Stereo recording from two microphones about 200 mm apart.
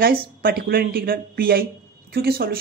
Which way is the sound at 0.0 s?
45° right (ahead or behind).